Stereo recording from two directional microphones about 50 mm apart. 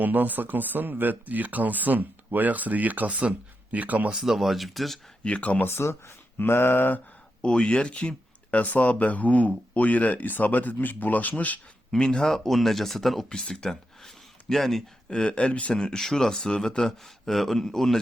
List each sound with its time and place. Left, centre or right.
0.0 s speech: right
4.1 s speech: centre
5.2 s speech: left
5.6 s speech: left
7.4 s speech: centre
11.9 s speech: centre
12.2 s speech: centre
13.3 s speech: centre
15.7 s speech: centre